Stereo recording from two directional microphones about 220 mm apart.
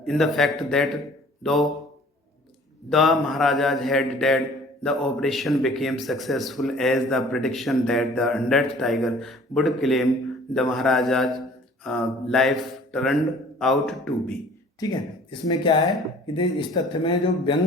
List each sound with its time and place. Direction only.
0.0 s mantra: centre (ahead or behind)
2.9 s mantra: centre (ahead or behind)
14.8 s speech: 20° left (ahead or behind)